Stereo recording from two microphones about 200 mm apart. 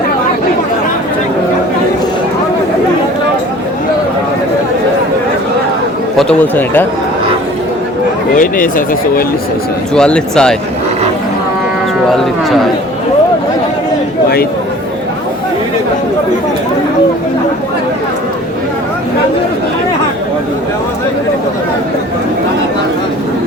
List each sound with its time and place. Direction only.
6.1 s speech: 5° left (ahead or behind)
8.4 s speech: 45° left (ahead or behind)
9.9 s speech: 5° left (ahead or behind)
12.0 s speech: centre (ahead or behind)